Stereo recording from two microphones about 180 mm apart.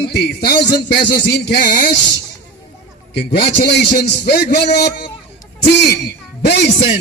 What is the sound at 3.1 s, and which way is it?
A man's voice, 65° left (ahead or behind).